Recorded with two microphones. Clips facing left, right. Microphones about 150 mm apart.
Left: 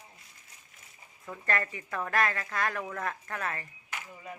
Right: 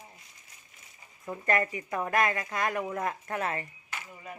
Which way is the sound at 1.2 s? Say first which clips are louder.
Right 4 dB; 20° right (ahead or behind).